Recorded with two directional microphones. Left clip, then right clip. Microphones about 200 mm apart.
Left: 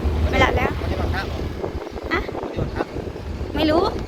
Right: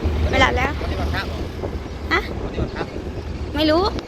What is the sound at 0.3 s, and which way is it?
Boat, 5° right (ahead or behind).